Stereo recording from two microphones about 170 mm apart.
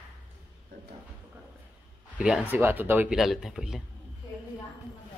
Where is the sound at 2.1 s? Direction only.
5° right (ahead or behind).